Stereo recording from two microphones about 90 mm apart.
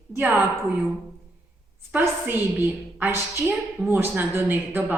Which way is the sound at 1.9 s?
20° right (ahead or behind).